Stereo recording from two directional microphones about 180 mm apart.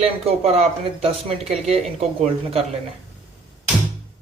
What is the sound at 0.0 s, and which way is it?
Speech, 35° right (ahead or behind).